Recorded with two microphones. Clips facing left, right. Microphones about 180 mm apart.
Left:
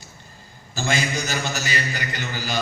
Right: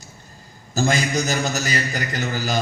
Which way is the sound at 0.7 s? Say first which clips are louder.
Right 4 dB; 40° right (ahead or behind).